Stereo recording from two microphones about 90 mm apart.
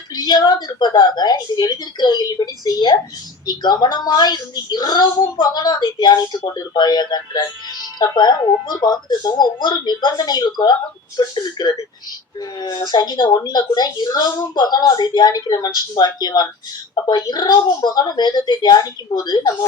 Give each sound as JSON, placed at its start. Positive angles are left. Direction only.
{"t": 0.1, "sound": "a woman's voice", "side_deg": 50}